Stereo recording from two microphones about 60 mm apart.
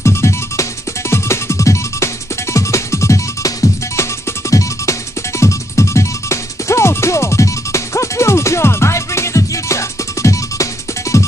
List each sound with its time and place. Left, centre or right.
0.0 s music: left